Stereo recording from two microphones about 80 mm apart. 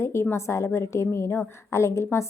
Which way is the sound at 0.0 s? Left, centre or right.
Left.